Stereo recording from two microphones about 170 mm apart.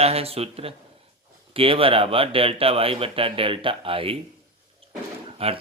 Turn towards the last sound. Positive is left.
turn(degrees=-35)  # may be behind; listen again after turning